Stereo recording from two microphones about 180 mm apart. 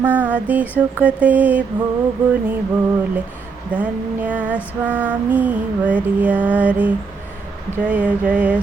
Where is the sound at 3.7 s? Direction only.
10° right (ahead or behind).